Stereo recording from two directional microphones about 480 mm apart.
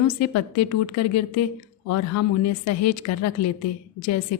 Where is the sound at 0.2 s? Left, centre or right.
Left.